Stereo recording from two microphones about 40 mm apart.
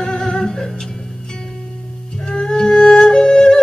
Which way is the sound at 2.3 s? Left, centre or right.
Centre.